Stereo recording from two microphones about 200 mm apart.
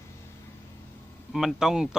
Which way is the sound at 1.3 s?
Centre (ahead or behind).